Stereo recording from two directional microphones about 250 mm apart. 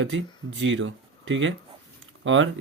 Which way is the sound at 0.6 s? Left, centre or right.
Right.